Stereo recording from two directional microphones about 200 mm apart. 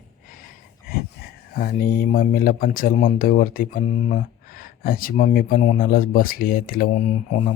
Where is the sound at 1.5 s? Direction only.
45° left (ahead or behind).